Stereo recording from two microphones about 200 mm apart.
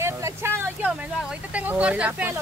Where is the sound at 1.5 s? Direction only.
5° right (ahead or behind).